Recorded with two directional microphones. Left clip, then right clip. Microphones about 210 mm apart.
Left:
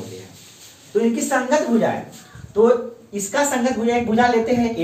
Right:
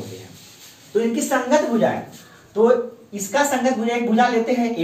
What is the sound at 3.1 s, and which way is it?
A woman's voice, 10° left (ahead or behind).